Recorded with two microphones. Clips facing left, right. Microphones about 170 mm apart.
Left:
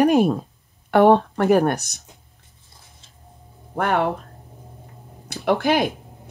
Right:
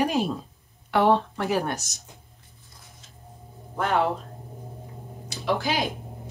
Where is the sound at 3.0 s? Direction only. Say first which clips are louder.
Right 2 dB; 30° left (ahead or behind).